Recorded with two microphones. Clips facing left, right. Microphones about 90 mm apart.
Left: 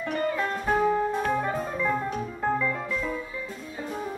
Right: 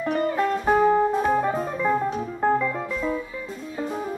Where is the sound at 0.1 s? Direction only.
30° right (ahead or behind).